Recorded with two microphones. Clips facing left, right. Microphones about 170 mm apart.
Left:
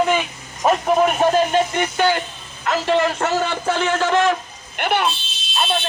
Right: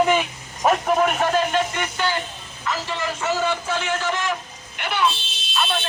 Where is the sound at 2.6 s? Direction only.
65° left (ahead or behind).